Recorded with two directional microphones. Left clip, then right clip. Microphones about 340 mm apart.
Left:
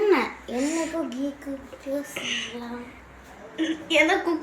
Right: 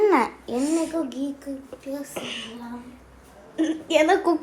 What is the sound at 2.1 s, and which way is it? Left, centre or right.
Speech, centre.